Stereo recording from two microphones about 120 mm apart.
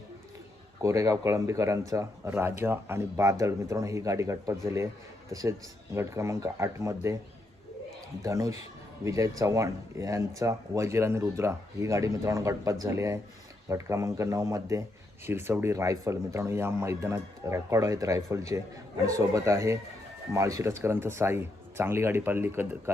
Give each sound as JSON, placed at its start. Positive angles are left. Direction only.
{"t": 0.8, "sound": "speech", "side_deg": -25}
{"t": 8.2, "sound": "speech", "side_deg": -30}